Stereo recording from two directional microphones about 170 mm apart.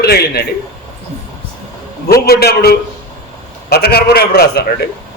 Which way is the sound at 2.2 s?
65° left (ahead or behind).